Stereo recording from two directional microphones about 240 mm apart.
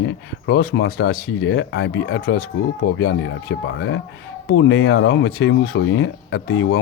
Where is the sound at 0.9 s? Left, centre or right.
Left.